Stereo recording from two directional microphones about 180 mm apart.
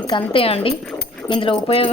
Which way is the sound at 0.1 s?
30° left (ahead or behind).